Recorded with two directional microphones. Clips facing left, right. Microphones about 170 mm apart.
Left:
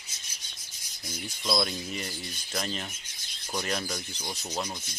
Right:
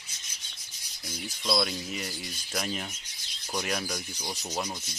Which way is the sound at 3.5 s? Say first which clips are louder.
Even; 5° right (ahead or behind).